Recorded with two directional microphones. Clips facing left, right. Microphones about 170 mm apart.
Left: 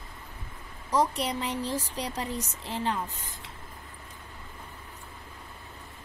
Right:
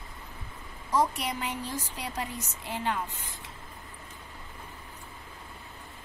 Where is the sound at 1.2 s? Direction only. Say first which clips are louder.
Left 3 dB; 35° left (ahead or behind).